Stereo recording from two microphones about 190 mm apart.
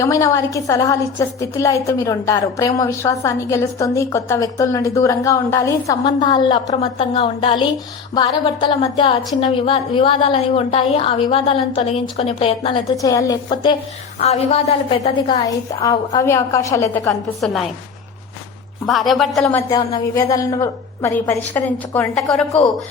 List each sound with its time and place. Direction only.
0.0 s a woman's voice: 15° left (ahead or behind)
7.1 s a woman's voice: 35° left (ahead or behind)
8.1 s a woman's voice: 20° left (ahead or behind)
13.0 s a woman's voice: 15° left (ahead or behind)
17.4 s speech: centre (ahead or behind)
18.9 s speech: centre (ahead or behind)
19.7 s a woman's voice: 20° left (ahead or behind); by 22.6 s 5° left (ahead or behind)